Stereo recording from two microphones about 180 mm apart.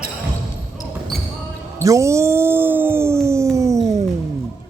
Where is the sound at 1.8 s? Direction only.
15° right (ahead or behind).